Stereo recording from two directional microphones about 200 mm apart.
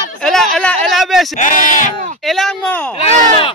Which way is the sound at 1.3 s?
40° left (ahead or behind).